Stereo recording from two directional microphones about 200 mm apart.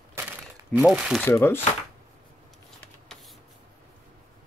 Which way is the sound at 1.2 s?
10° left (ahead or behind).